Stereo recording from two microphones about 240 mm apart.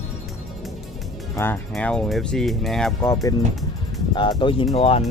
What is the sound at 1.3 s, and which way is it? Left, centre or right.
Speech, centre.